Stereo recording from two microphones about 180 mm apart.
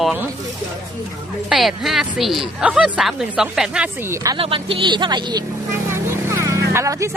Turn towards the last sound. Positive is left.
turn(degrees=-15)  # may be behind; listen again after turning